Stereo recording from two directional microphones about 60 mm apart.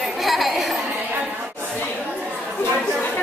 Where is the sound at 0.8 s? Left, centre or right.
Right.